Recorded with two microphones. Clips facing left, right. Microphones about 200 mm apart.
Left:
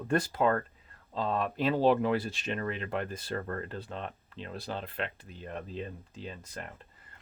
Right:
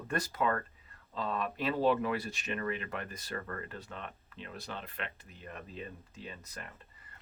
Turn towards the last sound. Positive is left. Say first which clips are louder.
# left 4 dB
turn(degrees=30)  # may be behind; listen again after turning